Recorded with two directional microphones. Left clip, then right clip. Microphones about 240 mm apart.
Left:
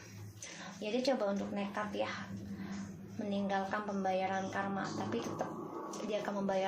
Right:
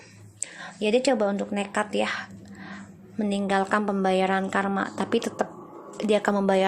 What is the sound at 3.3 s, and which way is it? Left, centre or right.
Speech, right.